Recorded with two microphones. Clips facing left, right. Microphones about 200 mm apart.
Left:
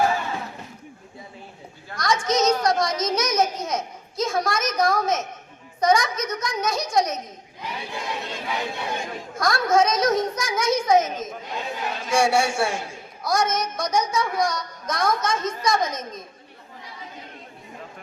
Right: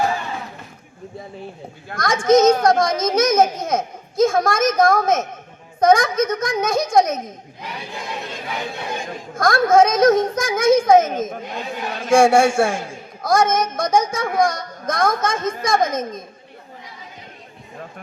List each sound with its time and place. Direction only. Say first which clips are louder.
1.9 s a child's voice: right 8 dB; 50° right (ahead or behind)
9.3 s a child's voice: right 6 dB; 50° right (ahead or behind)